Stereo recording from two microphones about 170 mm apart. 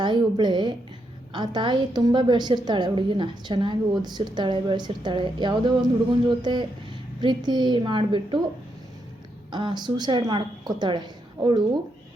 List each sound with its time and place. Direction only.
0.0 s a woman's voice: 25° right (ahead or behind)
9.5 s a woman's voice: 25° right (ahead or behind)